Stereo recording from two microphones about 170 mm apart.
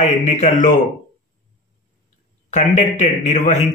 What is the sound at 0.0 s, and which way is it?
Speech, 40° left (ahead or behind).